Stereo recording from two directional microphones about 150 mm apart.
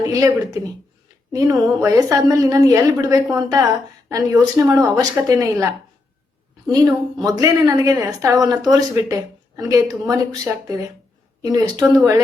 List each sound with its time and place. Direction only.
0.1 s a woman's voice: 20° right (ahead or behind)
6.7 s a woman's voice: 25° right (ahead or behind)